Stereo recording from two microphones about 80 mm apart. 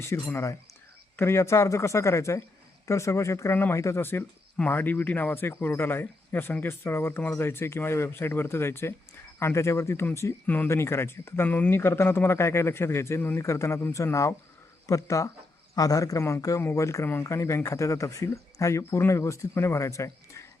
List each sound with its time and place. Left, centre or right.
0.0 s speech: left
10.4 s speech: left